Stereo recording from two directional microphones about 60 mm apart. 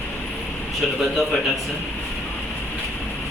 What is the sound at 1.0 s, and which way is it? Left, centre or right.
Speech, centre.